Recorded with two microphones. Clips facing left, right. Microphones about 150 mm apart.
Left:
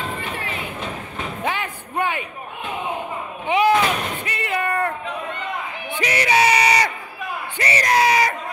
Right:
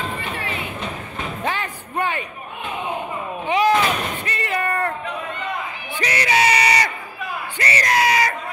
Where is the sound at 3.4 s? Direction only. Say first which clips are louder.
Left 1 dB; 15° left (ahead or behind).